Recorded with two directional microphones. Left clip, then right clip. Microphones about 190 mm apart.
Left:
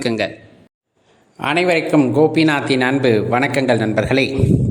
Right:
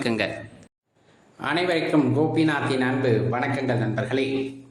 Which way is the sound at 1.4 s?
45° left (ahead or behind).